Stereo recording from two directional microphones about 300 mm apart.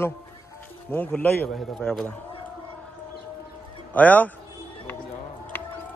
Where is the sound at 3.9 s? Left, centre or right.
Centre.